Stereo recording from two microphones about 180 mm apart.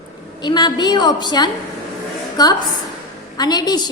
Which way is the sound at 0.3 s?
25° left (ahead or behind).